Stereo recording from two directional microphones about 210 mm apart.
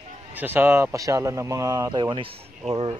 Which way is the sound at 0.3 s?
10° right (ahead or behind).